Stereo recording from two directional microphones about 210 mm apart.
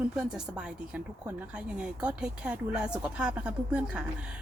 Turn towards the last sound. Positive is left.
turn(degrees=-5)  # may be behind; listen again after turning